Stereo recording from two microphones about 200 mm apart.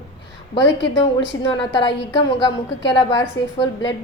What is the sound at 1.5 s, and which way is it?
Speech, 25° left (ahead or behind).